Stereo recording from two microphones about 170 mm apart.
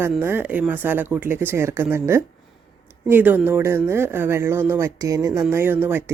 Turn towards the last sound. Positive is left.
turn(degrees=-10)  # may be behind; listen again after turning